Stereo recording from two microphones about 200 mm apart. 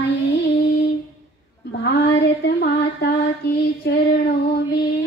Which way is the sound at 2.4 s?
50° left (ahead or behind).